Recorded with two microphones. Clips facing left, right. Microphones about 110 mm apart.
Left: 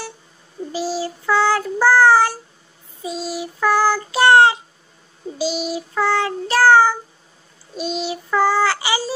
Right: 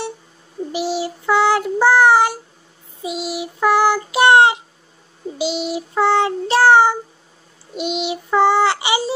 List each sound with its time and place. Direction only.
0.7 s child singing: 25° right (ahead or behind)